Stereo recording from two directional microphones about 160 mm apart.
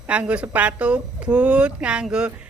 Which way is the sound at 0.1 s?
10° right (ahead or behind).